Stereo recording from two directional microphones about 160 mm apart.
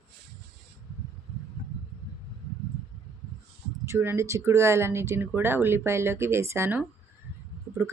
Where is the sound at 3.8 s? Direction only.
15° right (ahead or behind).